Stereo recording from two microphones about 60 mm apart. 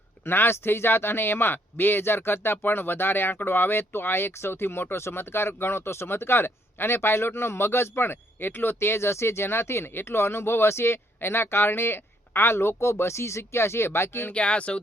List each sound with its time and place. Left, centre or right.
0.3 s speech: left
14.3 s speech: centre